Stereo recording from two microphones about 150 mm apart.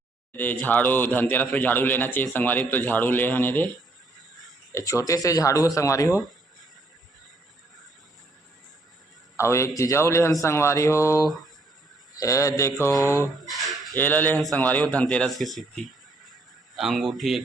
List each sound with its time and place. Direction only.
0.6 s a man's voice: 10° left (ahead or behind)
4.7 s a man's voice: 20° left (ahead or behind)
9.3 s a man's voice: 20° left (ahead or behind)
13.5 s bird: centre (ahead or behind)
13.9 s a man's voice: 10° left (ahead or behind)